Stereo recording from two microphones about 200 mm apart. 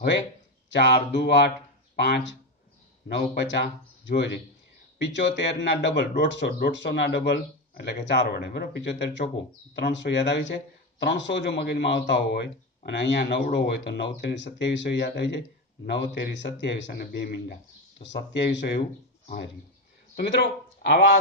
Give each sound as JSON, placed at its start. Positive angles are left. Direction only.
{"t": 0.7, "sound": "speech", "side_deg": 60}
{"t": 20.2, "sound": "speech", "side_deg": 55}